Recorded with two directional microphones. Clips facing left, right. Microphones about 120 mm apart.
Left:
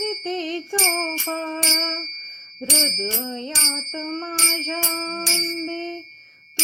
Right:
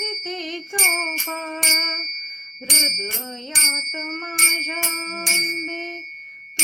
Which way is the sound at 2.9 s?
25° left (ahead or behind).